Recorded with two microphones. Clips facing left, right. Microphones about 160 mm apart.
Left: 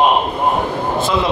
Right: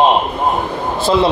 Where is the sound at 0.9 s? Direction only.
30° right (ahead or behind).